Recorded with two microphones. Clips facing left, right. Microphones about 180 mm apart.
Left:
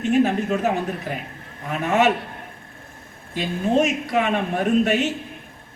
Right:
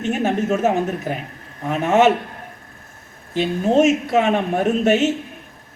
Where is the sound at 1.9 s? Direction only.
20° right (ahead or behind).